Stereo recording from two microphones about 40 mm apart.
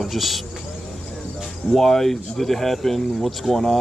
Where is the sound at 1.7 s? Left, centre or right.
Centre.